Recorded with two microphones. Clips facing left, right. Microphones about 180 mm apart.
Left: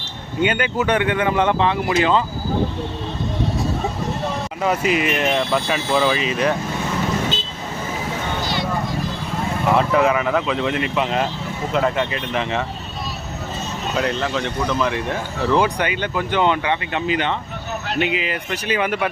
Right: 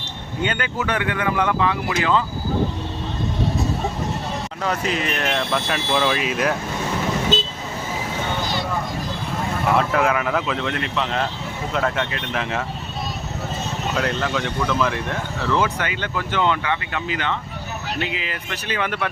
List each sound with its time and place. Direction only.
0.4 s speech: 15° left (ahead or behind)
4.6 s speech: 10° left (ahead or behind)
9.7 s speech: centre (ahead or behind)
13.9 s speech: centre (ahead or behind)
15.5 s speech: 15° left (ahead or behind)